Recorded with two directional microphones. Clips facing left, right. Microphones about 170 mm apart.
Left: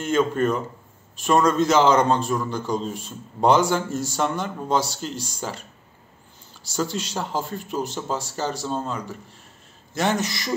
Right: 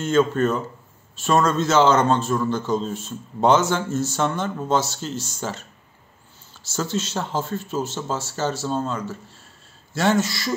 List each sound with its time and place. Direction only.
0.0 s a man's voice: 10° left (ahead or behind)